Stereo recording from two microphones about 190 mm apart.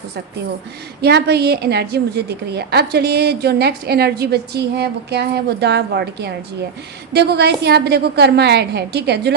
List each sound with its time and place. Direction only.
1.0 s a woman's voice: 60° right (ahead or behind)